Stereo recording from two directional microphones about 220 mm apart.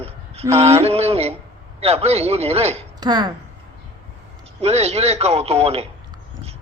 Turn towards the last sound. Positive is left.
turn(degrees=-30)  # may be behind; listen again after turning